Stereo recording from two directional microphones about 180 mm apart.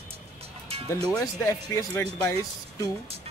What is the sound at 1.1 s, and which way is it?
Speech, 15° left (ahead or behind).